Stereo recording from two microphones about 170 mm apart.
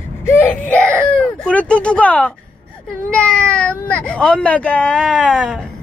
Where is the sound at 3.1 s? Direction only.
5° left (ahead or behind).